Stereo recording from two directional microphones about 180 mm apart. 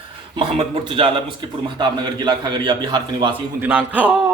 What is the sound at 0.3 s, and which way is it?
A man's voice, 30° right (ahead or behind).